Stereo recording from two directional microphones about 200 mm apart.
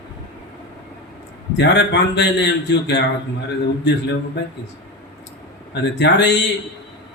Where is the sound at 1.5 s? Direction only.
60° left (ahead or behind).